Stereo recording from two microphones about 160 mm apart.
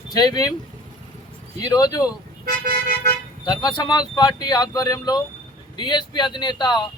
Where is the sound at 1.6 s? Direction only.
25° left (ahead or behind).